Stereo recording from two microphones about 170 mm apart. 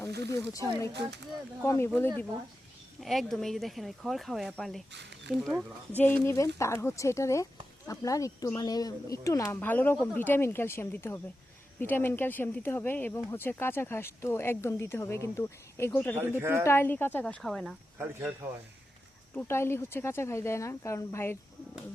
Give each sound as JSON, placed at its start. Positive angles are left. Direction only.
{"t": 0.3, "sound": "speech", "side_deg": 20}
{"t": 3.0, "sound": "speech", "side_deg": 0}
{"t": 4.9, "sound": "speech", "side_deg": -90}
{"t": 5.5, "sound": "speech", "side_deg": -10}
{"t": 6.0, "sound": "speech", "side_deg": 10}
{"t": 16.4, "sound": "speech", "side_deg": -15}
{"t": 16.6, "sound": "speech", "side_deg": 15}
{"t": 17.9, "sound": "speech", "side_deg": -15}
{"t": 19.3, "sound": "speech", "side_deg": 10}